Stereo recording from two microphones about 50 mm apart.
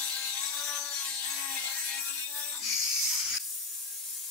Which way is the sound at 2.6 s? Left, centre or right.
Centre.